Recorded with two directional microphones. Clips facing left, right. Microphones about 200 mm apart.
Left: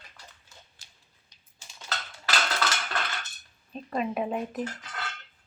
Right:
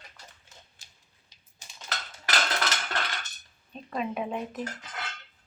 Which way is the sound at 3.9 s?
5° left (ahead or behind).